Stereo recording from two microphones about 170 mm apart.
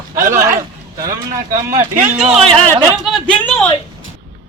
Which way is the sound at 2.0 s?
10° right (ahead or behind).